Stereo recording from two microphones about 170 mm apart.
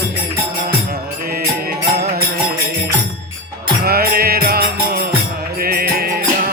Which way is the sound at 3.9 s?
65° right (ahead or behind).